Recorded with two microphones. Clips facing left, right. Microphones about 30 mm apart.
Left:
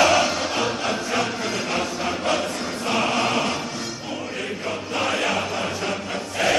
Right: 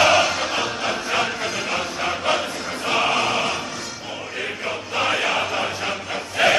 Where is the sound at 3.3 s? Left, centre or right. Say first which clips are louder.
Right 1 dB; centre.